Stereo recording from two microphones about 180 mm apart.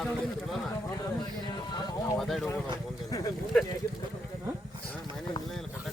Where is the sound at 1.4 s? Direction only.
25° left (ahead or behind).